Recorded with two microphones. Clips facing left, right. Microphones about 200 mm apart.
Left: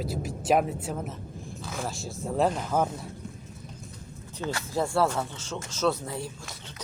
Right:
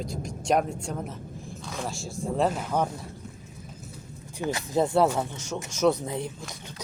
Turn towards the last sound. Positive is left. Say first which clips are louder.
# right 4 dB
turn(degrees=-20)  # may be behind; listen again after turning